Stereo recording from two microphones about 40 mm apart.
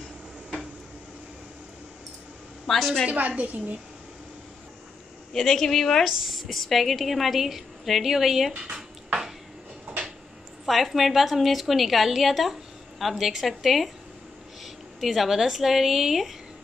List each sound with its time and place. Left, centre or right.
2.6 s a woman's voice: centre
3.1 s a woman's voice: right
5.4 s speech: centre
6.0 s a woman's voice: centre
8.5 s dishes: centre
10.6 s a woman's voice: centre